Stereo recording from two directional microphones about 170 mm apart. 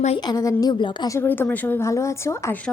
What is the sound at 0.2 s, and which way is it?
A woman's voice, 20° left (ahead or behind).